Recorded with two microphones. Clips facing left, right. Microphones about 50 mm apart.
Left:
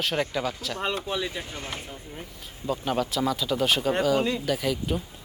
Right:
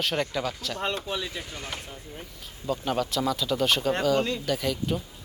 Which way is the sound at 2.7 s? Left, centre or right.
Centre.